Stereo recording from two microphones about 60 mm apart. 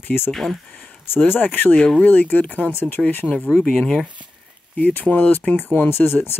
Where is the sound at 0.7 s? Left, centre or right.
Left.